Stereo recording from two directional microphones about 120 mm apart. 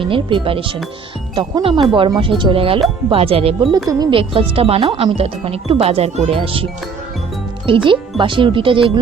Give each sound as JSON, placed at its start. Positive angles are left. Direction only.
{"t": 0.0, "sound": "speech", "side_deg": -45}
{"t": 3.8, "sound": "speech", "side_deg": -30}
{"t": 4.1, "sound": "speech", "side_deg": -50}
{"t": 7.7, "sound": "speech", "side_deg": -50}